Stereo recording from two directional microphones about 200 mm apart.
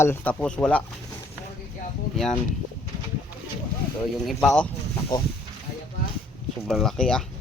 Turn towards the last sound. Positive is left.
turn(degrees=5)  # may be behind; listen again after turning